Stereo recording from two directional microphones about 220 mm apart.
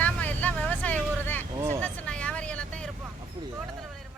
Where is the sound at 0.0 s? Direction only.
5° left (ahead or behind).